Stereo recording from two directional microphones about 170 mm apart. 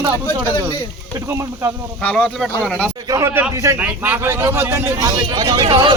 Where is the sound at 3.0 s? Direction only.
20° right (ahead or behind).